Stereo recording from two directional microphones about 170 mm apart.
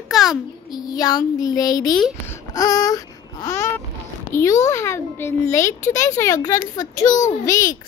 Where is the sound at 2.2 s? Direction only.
20° left (ahead or behind).